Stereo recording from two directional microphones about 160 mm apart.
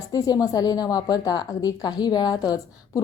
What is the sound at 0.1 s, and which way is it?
A woman's voice, 25° left (ahead or behind).